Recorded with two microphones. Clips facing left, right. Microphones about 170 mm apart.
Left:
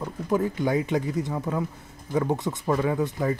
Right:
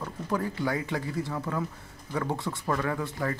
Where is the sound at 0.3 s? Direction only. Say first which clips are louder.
Left 5 dB; 20° left (ahead or behind).